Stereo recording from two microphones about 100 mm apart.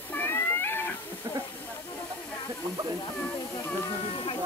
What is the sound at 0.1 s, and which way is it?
Cat, 20° left (ahead or behind).